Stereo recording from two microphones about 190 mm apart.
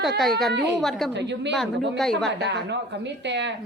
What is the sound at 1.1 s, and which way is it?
Speech, 65° right (ahead or behind).